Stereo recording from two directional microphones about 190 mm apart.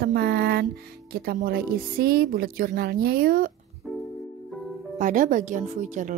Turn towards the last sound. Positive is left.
turn(degrees=-40)  # may be behind; listen again after turning